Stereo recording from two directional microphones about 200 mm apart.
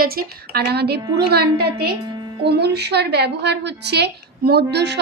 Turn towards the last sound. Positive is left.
turn(degrees=-55)  # may be behind; listen again after turning